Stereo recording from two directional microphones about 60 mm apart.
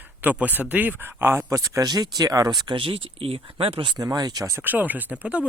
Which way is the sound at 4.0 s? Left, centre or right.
Right.